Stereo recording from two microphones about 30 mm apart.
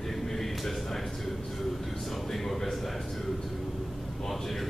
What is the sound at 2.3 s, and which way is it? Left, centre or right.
Speech, centre.